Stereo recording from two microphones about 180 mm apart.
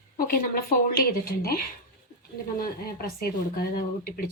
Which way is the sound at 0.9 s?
55° left (ahead or behind).